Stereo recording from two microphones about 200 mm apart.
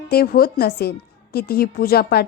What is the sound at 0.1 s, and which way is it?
A woman's voice, 50° left (ahead or behind).